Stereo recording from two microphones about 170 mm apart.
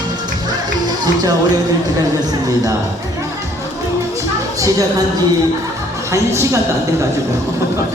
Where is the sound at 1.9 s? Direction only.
20° right (ahead or behind).